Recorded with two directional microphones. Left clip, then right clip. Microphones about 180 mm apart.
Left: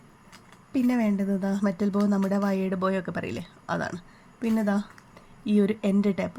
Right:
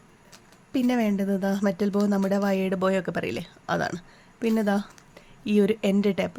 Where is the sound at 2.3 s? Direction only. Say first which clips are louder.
Right 3 dB; 45° right (ahead or behind).